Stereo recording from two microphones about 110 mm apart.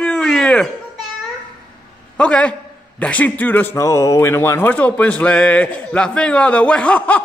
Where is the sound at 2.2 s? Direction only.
10° left (ahead or behind).